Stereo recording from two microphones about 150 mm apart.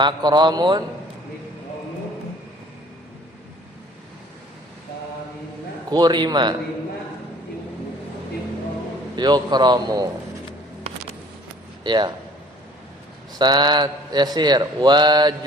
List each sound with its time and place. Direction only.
0.0 s a man's voice: 30° right (ahead or behind)
5.9 s speech: 25° right (ahead or behind)
9.1 s speech: 30° right (ahead or behind)
11.8 s speech: 30° right (ahead or behind)
13.4 s speech: 30° right (ahead or behind)